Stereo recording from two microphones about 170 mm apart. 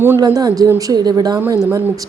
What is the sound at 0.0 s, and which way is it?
A woman's voice, 15° right (ahead or behind).